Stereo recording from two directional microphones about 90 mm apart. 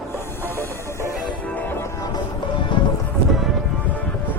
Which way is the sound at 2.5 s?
60° left (ahead or behind).